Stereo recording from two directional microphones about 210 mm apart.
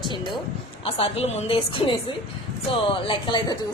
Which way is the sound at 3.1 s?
20° left (ahead or behind).